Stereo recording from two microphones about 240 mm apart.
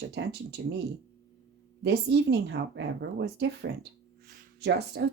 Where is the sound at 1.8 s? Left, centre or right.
Right.